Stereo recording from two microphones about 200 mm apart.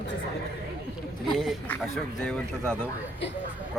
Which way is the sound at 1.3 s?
Centre (ahead or behind).